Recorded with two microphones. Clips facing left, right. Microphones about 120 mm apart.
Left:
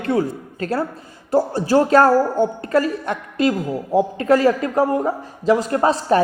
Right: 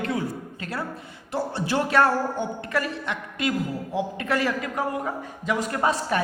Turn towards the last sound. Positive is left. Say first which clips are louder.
# left 7 dB
turn(degrees=35)  # may be behind; listen again after turning